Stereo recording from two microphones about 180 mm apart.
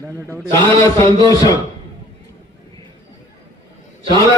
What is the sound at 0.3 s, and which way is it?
A man's voice, 15° left (ahead or behind).